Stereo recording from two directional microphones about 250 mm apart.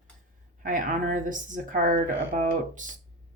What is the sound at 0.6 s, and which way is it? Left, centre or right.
Speech, right.